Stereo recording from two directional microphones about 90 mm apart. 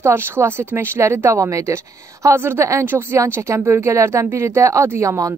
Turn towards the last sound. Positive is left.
turn(degrees=-35)  # may be behind; listen again after turning